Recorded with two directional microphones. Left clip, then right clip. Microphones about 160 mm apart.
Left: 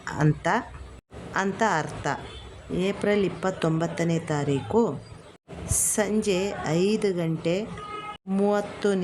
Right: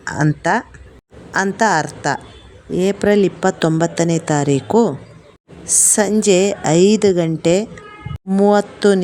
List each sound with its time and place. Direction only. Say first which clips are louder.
0.0 s a woman's voice: right 8 dB; 35° right (ahead or behind)